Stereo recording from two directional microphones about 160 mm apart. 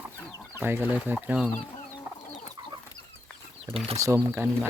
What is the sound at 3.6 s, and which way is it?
Speech, 35° right (ahead or behind).